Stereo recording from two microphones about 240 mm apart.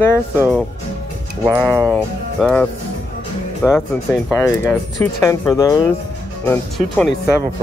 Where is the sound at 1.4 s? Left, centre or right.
Centre.